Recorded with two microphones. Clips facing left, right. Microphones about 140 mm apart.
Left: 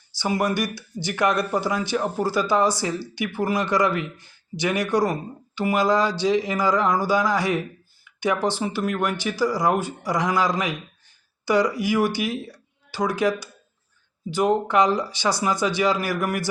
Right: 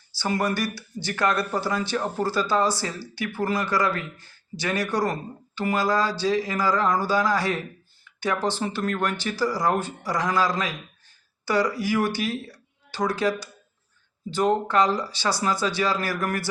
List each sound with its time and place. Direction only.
0.2 s speech: 15° left (ahead or behind)